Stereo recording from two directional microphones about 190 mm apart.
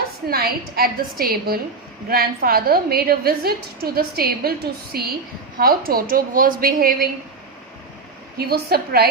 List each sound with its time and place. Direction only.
0.3 s a woman's voice: 55° right (ahead or behind)
8.4 s a woman's voice: 55° right (ahead or behind)